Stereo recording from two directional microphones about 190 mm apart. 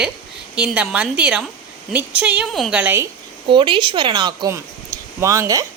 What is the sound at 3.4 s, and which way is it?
Speech, 25° right (ahead or behind).